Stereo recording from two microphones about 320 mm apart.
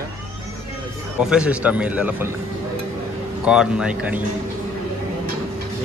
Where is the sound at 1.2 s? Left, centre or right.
Centre.